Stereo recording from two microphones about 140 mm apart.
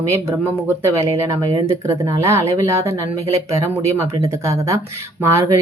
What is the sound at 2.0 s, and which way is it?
Speech, 25° right (ahead or behind).